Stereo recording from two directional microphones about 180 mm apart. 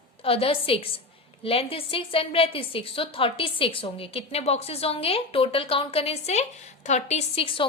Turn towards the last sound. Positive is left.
turn(degrees=30)  # may be behind; listen again after turning